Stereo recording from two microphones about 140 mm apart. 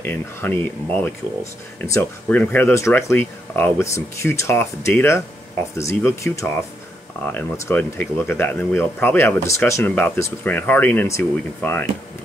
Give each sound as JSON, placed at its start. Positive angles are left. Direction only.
{"t": 0.0, "sound": "speech", "side_deg": 15}